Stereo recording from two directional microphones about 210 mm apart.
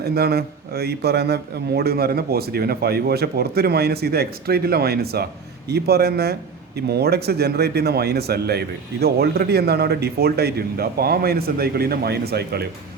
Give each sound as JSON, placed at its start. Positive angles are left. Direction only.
{"t": 0.0, "sound": "a man's voice", "side_deg": -50}